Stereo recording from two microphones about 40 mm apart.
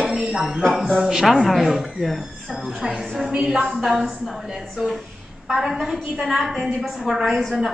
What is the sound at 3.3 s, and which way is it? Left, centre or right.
Speech, centre.